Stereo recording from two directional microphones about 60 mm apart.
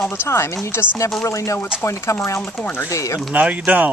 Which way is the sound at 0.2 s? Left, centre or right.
Left.